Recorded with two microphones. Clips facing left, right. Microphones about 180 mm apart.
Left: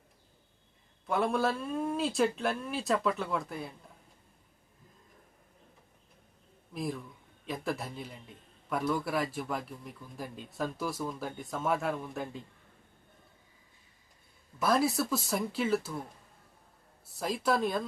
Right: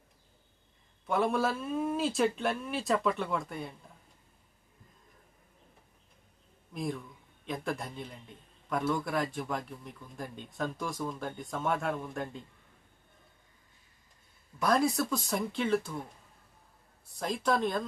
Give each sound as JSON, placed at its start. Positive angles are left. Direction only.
{"t": 1.0, "sound": "a man's voice", "side_deg": 0}
{"t": 6.7, "sound": "a man's voice", "side_deg": 0}
{"t": 14.6, "sound": "a man's voice", "side_deg": 5}
{"t": 17.2, "sound": "a man's voice", "side_deg": 5}